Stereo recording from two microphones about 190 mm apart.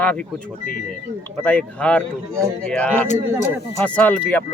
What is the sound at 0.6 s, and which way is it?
Speech, 55° left (ahead or behind).